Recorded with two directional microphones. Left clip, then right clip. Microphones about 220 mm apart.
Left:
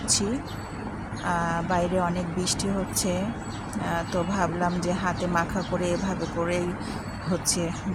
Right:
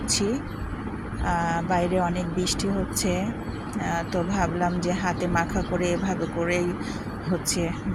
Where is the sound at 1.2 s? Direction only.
Centre (ahead or behind).